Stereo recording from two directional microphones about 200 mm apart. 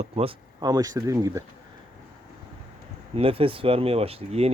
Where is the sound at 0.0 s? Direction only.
30° right (ahead or behind).